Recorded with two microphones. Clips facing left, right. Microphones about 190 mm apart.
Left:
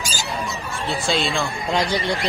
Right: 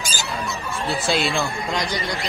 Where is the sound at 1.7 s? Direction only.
30° left (ahead or behind).